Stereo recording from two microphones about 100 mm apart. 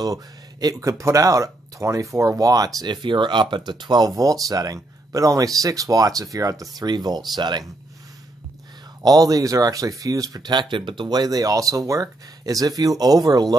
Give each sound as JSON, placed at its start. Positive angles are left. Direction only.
{"t": 0.0, "sound": "speech", "side_deg": -40}
{"t": 9.0, "sound": "speech", "side_deg": -40}